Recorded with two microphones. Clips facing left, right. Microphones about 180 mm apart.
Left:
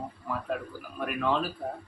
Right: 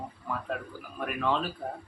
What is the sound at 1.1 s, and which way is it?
Speech, centre (ahead or behind).